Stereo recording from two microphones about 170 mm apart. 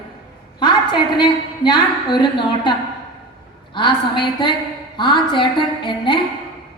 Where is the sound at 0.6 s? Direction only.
25° left (ahead or behind).